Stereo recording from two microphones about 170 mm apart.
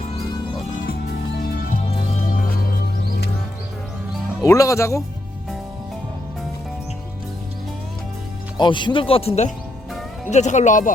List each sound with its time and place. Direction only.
0.9 s music: 65° left (ahead or behind)
1.9 s music: 45° left (ahead or behind)
4.4 s speech: 20° left (ahead or behind)
8.5 s speech: 25° left (ahead or behind); by 10.9 s 50° left (ahead or behind)